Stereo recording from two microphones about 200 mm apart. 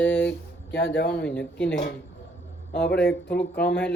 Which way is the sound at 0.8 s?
65° left (ahead or behind).